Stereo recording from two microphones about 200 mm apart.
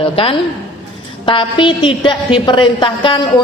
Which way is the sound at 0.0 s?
30° left (ahead or behind).